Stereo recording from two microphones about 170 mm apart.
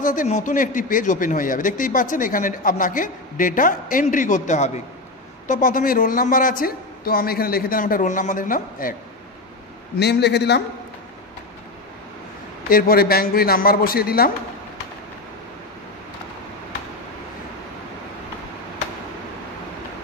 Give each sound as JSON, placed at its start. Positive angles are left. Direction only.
{"t": 0.0, "sound": "a man's voice", "side_deg": 50}
{"t": 9.9, "sound": "speech", "side_deg": 80}
{"t": 12.6, "sound": "speech", "side_deg": 60}